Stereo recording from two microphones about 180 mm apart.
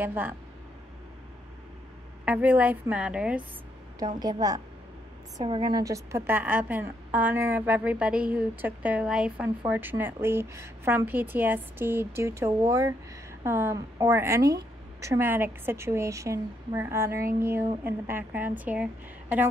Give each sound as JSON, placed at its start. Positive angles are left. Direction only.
{"t": 0.0, "sound": "a woman's voice", "side_deg": -10}
{"t": 2.2, "sound": "a woman's voice", "side_deg": -5}
{"t": 4.2, "sound": "a woman's voice", "side_deg": -20}